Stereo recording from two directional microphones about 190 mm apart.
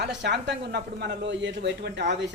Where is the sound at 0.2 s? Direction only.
65° right (ahead or behind).